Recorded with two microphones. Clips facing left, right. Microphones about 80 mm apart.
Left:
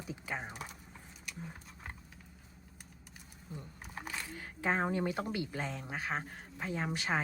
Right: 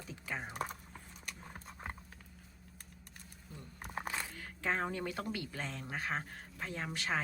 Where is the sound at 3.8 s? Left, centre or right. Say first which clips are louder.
Right 5 dB; right.